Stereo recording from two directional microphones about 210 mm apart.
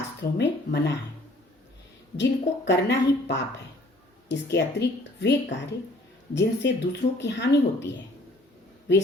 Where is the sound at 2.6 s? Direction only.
60° left (ahead or behind).